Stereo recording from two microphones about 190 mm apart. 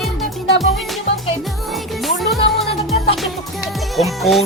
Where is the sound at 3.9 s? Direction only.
Centre (ahead or behind).